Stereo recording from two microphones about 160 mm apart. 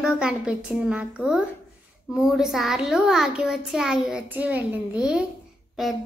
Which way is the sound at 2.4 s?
Centre (ahead or behind).